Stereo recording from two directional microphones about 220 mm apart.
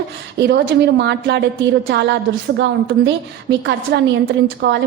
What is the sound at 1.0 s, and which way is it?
Speech, 50° right (ahead or behind).